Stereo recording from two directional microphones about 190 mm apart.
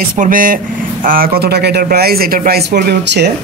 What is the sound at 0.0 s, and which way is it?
Speech, 45° right (ahead or behind).